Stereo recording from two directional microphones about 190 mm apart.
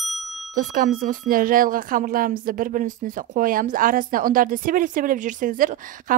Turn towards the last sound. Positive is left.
turn(degrees=-45)  # may be behind; listen again after turning